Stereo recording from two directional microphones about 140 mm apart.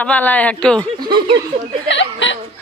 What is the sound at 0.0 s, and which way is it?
Speech, 10° left (ahead or behind).